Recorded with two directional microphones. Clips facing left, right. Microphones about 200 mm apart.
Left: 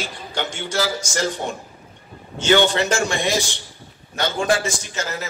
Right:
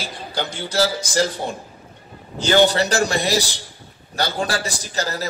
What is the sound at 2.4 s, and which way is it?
A man's voice, 35° right (ahead or behind).